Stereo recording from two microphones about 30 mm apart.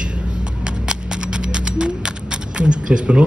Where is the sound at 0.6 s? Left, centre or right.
Right.